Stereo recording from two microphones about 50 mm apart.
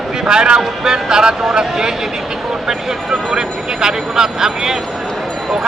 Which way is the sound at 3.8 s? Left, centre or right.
Centre.